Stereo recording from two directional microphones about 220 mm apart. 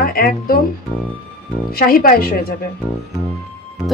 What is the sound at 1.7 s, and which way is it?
Speech, 40° left (ahead or behind).